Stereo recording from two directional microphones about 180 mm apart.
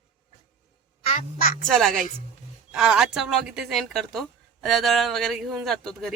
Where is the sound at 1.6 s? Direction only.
Centre (ahead or behind).